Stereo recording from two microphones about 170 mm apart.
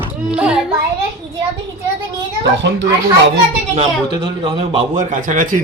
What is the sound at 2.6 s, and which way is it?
Speech, 90° right.